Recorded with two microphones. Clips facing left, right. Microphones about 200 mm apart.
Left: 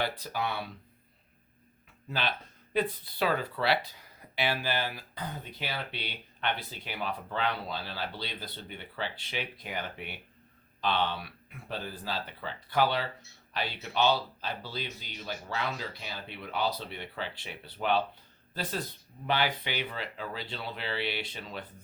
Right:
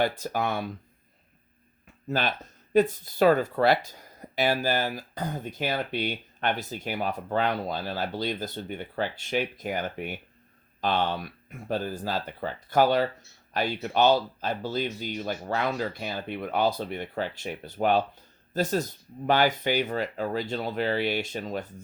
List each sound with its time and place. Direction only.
0.0 s speech: 45° right (ahead or behind)
2.0 s speech: 45° right (ahead or behind)